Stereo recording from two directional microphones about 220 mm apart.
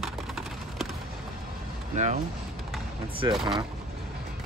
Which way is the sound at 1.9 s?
30° right (ahead or behind).